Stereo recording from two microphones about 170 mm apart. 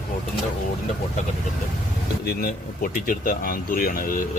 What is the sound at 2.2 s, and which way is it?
Speech, 60° left (ahead or behind).